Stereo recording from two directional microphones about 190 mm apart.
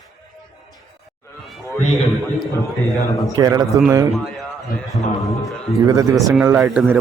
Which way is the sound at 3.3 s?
20° right (ahead or behind).